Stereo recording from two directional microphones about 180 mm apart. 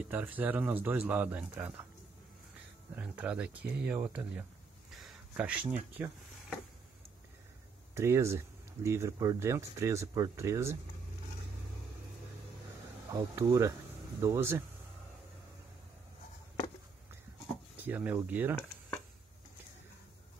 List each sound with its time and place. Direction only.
0.0 s speech: 10° right (ahead or behind)
3.0 s speech: 10° right (ahead or behind)
4.9 s a sound: 5° right (ahead or behind)
7.9 s speech: 15° right (ahead or behind)
13.1 s speech: 15° right (ahead or behind)
17.7 s speech: 10° right (ahead or behind)